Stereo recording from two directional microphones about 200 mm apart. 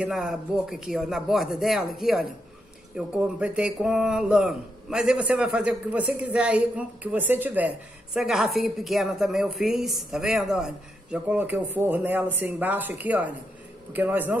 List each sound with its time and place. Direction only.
0.0 s a man's voice: centre (ahead or behind)
3.3 s a man's voice: 5° right (ahead or behind)